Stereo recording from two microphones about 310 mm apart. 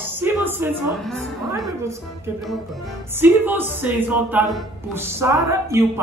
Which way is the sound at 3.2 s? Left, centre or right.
Centre.